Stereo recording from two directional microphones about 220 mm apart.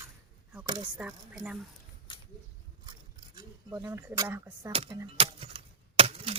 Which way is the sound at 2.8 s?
20° right (ahead or behind).